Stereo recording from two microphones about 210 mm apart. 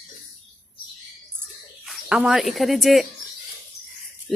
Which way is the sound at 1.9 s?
Centre (ahead or behind).